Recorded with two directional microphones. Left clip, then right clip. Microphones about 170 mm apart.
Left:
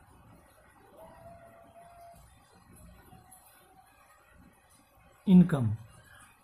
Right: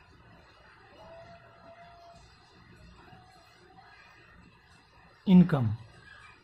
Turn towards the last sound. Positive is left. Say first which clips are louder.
# right 1 dB
turn(degrees=-20)  # may be behind; listen again after turning